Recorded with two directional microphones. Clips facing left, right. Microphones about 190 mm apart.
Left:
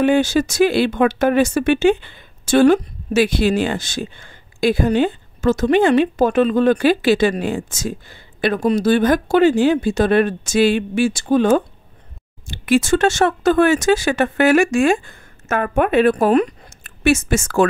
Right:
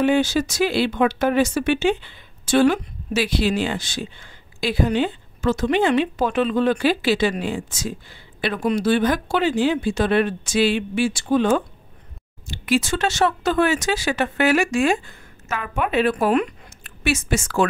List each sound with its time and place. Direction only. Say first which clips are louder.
0.0 s speech: left 3 dB; 50° left (ahead or behind)
12.4 s speech: left 5 dB; 55° left (ahead or behind)